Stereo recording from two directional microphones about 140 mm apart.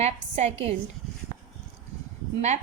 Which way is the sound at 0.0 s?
50° right (ahead or behind).